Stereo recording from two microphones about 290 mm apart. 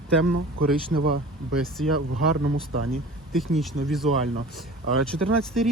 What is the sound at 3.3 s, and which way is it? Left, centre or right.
Speech, centre.